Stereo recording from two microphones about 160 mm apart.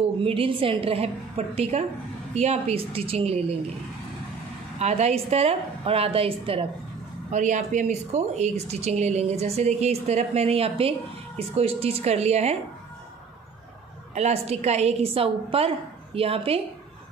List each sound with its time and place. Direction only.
0.2 s a woman's voice: 35° right (ahead or behind)
4.7 s a woman's voice: 45° right (ahead or behind)
7.2 s a woman's voice: 50° right (ahead or behind)
14.1 s a woman's voice: 40° right (ahead or behind)